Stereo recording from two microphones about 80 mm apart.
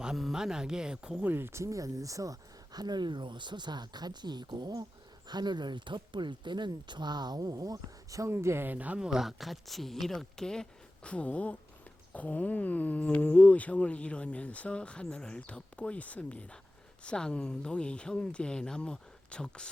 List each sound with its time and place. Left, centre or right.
0.0 s speech: centre
1.2 s speech: right
8.3 s speech: right
9.0 s speech: centre